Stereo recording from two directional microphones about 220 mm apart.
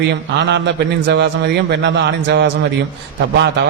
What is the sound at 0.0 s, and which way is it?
A man's voice, 50° right (ahead or behind).